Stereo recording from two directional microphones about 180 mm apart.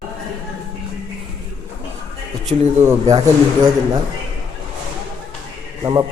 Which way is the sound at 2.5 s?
40° right (ahead or behind).